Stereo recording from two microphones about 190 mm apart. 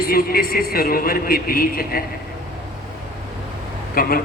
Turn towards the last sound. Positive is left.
turn(degrees=50)  # may be behind; listen again after turning